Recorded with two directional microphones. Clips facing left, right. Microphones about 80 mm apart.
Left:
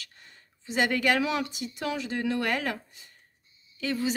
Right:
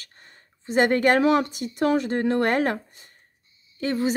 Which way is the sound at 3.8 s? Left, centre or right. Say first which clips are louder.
Right 5 dB; right.